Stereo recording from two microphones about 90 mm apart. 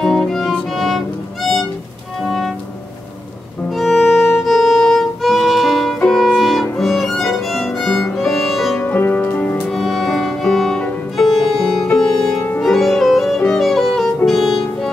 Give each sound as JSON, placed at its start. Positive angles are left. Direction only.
{"t": 0.0, "sound": "violin", "side_deg": 5}
{"t": 2.2, "sound": "music", "side_deg": 5}
{"t": 3.7, "sound": "music", "side_deg": 0}
{"t": 4.1, "sound": "violin", "side_deg": 0}
{"t": 8.8, "sound": "music", "side_deg": 20}
{"t": 9.7, "sound": "music", "side_deg": 5}